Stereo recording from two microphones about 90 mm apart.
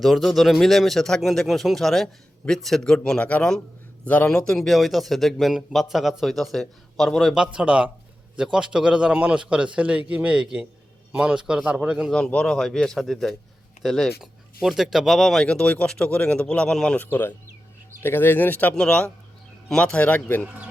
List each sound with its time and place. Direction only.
0.0 s a man's voice: centre (ahead or behind)
12.1 s speech: 10° left (ahead or behind)
17.1 s speech: 25° left (ahead or behind)